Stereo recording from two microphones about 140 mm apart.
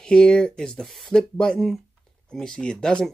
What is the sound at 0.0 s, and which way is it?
Speech, 5° left (ahead or behind).